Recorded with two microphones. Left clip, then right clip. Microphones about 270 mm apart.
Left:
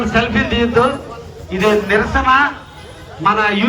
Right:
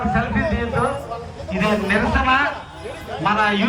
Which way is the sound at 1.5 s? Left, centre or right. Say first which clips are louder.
Left 6 dB; centre.